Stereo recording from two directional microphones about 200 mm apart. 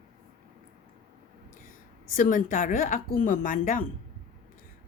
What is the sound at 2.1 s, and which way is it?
A woman's voice, 40° left (ahead or behind).